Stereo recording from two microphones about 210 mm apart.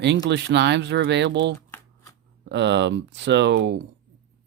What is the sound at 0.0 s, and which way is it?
Speech, 55° right (ahead or behind).